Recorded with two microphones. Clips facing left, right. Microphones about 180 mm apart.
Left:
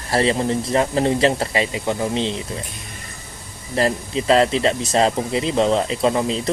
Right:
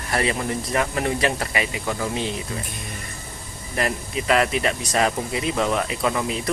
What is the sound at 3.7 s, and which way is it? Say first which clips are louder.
Speech: left 5 dB; 30° left (ahead or behind).